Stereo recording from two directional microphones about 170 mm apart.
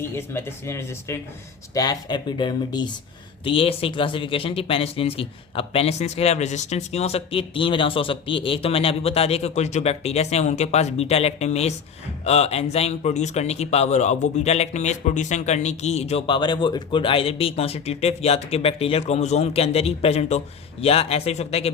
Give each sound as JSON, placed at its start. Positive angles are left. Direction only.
{"t": 0.0, "sound": "speech", "side_deg": 15}